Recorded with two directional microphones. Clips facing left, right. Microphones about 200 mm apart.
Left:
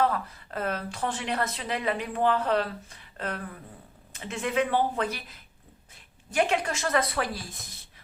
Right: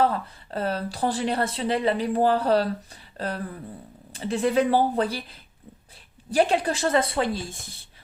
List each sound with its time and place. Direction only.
0.0 s a woman's voice: 30° right (ahead or behind)